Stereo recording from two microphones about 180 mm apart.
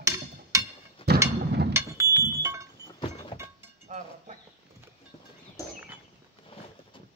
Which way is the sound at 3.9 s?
45° right (ahead or behind).